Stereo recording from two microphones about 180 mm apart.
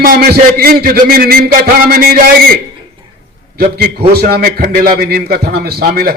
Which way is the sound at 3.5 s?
60° right (ahead or behind).